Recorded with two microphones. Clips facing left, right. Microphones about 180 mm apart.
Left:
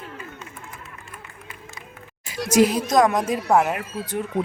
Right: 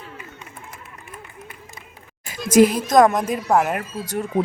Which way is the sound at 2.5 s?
50° right (ahead or behind).